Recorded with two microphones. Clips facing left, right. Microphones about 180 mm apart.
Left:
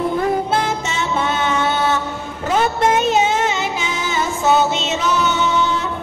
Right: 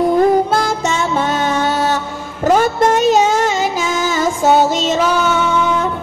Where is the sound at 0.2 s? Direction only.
40° right (ahead or behind).